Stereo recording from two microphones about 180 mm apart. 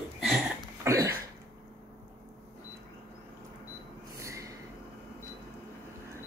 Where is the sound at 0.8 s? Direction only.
20° right (ahead or behind).